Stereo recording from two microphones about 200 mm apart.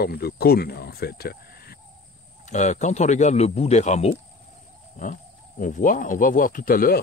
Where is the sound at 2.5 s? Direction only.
35° left (ahead or behind).